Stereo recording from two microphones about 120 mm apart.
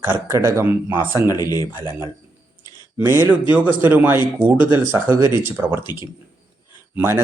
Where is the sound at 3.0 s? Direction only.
20° right (ahead or behind).